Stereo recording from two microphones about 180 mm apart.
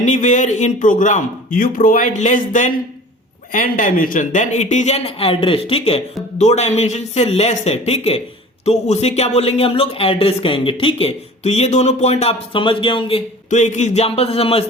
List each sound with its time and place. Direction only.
0.0 s a man's voice: 45° left (ahead or behind)